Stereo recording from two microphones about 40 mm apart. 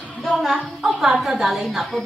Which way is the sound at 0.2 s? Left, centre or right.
Centre.